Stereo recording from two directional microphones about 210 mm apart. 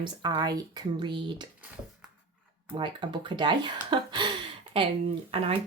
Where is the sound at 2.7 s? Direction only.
20° right (ahead or behind).